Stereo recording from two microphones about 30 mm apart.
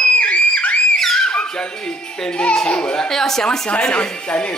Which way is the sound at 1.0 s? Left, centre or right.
Centre.